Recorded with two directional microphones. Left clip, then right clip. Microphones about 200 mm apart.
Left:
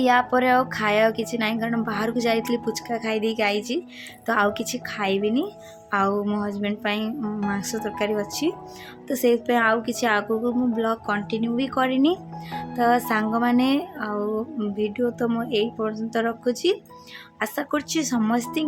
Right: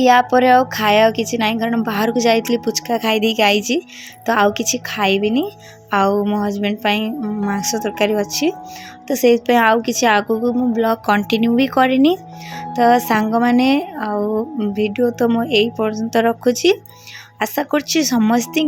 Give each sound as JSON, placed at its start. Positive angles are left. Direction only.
{"t": 0.0, "sound": "a woman's voice", "side_deg": -20}